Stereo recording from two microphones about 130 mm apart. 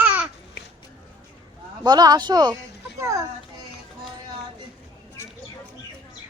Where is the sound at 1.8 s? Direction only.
30° right (ahead or behind).